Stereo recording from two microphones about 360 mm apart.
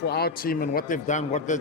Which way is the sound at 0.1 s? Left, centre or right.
Left.